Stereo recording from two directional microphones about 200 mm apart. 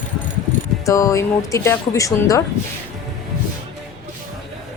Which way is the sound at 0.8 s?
15° left (ahead or behind).